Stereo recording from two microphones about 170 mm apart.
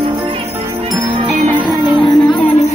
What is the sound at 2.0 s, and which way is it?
Music, 25° left (ahead or behind).